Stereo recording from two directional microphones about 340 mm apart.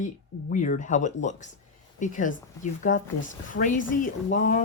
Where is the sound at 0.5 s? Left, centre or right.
Left.